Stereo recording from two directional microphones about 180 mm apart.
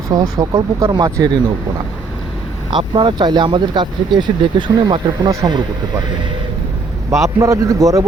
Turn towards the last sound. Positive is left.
turn(degrees=-20)  # may be behind; listen again after turning